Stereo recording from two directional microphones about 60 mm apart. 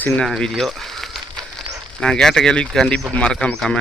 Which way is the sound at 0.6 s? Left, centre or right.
Centre.